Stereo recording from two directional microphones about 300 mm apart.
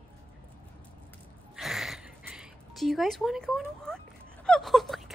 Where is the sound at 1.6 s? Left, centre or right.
Centre.